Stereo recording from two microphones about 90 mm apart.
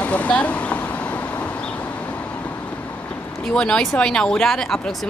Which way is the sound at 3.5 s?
10° left (ahead or behind).